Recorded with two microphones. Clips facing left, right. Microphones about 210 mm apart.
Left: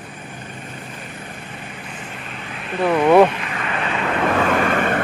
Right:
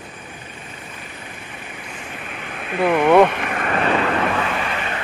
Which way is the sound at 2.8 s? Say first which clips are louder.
Left 1 dB; 5° right (ahead or behind).